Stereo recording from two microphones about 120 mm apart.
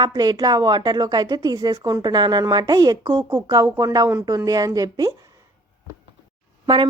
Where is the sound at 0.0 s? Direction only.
35° right (ahead or behind).